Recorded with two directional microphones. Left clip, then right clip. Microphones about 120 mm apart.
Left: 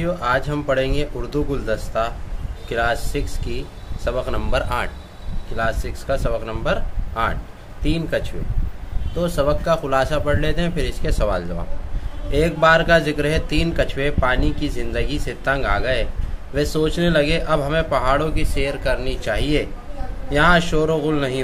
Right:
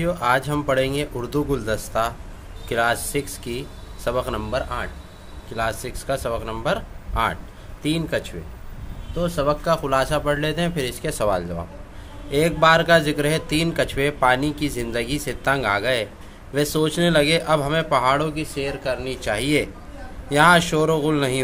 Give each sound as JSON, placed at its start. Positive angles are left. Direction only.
{"t": 0.0, "sound": "a man's voice", "side_deg": -35}
{"t": 4.5, "sound": "a man's voice", "side_deg": 0}
{"t": 5.6, "sound": "a man's voice", "side_deg": -35}
{"t": 9.1, "sound": "speech", "side_deg": -15}
{"t": 9.5, "sound": "a man's voice", "side_deg": -35}
{"t": 12.3, "sound": "a man's voice", "side_deg": -30}
{"t": 18.3, "sound": "speech", "side_deg": -15}
{"t": 19.1, "sound": "a man's voice", "side_deg": -35}